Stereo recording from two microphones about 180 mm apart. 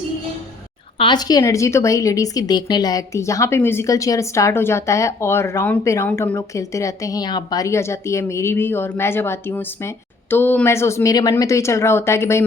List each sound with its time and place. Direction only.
0.9 s a woman's voice: 25° left (ahead or behind)